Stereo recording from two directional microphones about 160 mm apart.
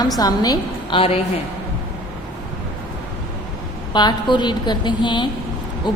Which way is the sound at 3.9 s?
30° left (ahead or behind).